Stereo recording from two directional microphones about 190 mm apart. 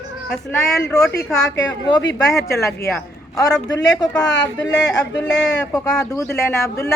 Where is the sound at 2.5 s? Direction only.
15° left (ahead or behind).